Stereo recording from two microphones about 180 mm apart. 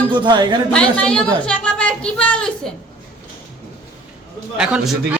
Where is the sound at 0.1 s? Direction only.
25° right (ahead or behind).